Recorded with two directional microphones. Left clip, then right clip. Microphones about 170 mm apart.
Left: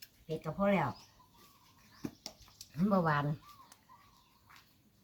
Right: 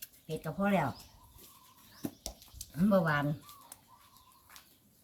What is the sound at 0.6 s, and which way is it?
Speech, 15° left (ahead or behind).